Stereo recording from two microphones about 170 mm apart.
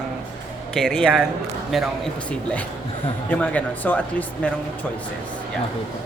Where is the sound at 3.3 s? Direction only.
10° left (ahead or behind).